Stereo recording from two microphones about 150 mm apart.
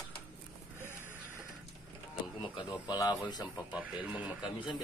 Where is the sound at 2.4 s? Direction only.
30° left (ahead or behind).